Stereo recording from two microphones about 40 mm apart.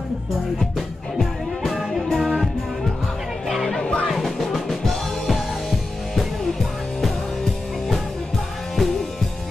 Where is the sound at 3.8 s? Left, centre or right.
Left.